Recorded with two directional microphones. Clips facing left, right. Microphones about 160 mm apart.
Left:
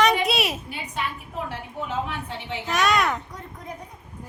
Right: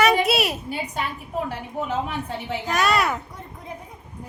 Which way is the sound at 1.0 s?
40° right (ahead or behind).